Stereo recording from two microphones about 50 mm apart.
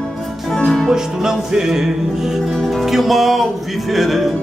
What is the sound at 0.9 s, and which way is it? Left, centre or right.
Music, centre.